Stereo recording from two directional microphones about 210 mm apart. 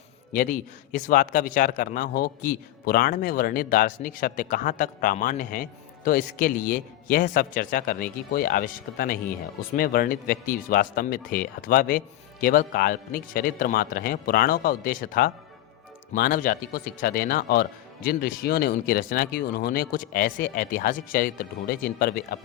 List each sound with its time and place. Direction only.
0.3 s speech: 40° left (ahead or behind)